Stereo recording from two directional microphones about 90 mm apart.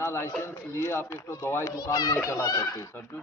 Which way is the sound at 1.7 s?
45° left (ahead or behind).